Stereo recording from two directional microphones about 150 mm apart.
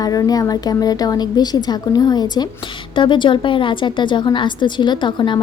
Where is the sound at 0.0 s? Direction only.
25° left (ahead or behind).